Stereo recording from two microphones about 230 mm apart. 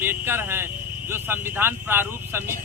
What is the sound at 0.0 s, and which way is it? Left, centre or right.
Speech, centre.